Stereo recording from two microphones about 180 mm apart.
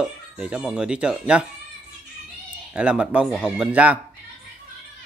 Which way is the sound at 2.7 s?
5° right (ahead or behind).